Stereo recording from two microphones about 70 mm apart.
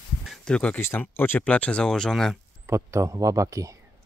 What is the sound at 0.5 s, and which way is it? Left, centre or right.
Speech, centre.